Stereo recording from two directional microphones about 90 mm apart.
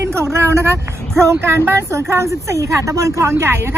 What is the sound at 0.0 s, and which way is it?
Vehicle, 30° right (ahead or behind).